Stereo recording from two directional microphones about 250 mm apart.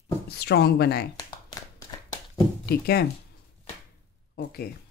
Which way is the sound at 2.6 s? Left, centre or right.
Left.